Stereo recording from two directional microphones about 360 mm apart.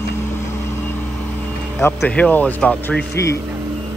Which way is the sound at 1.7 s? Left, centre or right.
Centre.